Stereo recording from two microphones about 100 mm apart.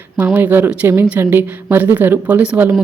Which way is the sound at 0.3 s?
20° right (ahead or behind).